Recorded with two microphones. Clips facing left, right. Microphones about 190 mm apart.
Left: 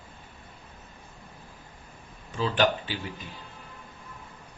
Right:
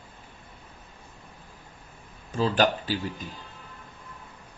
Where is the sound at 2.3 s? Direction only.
40° right (ahead or behind).